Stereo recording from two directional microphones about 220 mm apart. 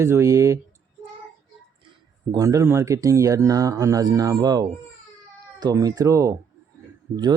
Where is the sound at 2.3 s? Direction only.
15° right (ahead or behind).